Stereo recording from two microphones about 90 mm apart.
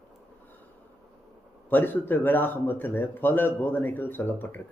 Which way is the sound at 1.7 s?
20° left (ahead or behind).